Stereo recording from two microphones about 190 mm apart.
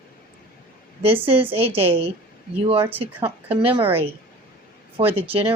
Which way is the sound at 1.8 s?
30° right (ahead or behind).